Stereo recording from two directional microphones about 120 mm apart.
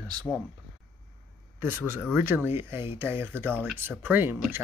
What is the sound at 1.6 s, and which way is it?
Speech, 15° right (ahead or behind).